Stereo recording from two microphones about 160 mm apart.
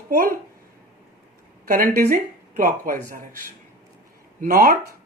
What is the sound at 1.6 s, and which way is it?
Speech, 60° right (ahead or behind).